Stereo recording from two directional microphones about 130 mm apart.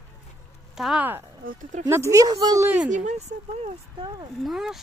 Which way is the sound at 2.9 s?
70° right (ahead or behind).